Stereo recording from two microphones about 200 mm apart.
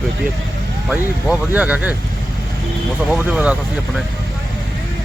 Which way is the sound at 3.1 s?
5° right (ahead or behind).